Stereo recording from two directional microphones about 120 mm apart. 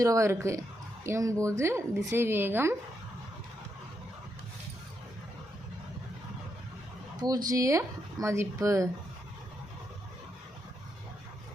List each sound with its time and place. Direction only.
0.0 s a woman's voice: 25° right (ahead or behind)
7.2 s a woman's voice: 30° right (ahead or behind)